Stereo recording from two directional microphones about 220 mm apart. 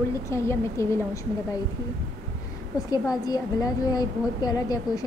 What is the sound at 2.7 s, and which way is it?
A woman's voice, 15° left (ahead or behind).